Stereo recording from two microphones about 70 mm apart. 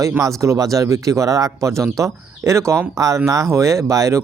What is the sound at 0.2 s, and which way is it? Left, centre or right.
Speech, right.